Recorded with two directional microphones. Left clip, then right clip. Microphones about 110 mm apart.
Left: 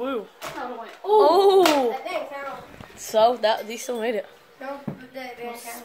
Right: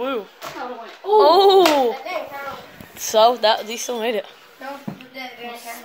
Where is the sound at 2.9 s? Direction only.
35° right (ahead or behind).